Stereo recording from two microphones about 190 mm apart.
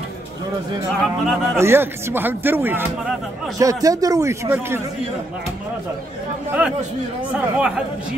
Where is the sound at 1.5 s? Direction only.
10° right (ahead or behind).